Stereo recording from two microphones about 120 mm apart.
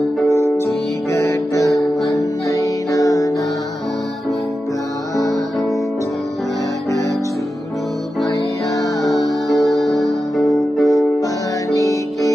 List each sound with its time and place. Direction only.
0.3 s music: 25° left (ahead or behind)
5.1 s music: 30° left (ahead or behind)
8.7 s music: 30° left (ahead or behind)
9.2 s music: centre (ahead or behind)
11.7 s music: 30° left (ahead or behind)